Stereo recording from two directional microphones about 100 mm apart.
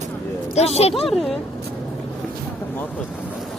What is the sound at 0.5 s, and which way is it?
Speech, 90° left.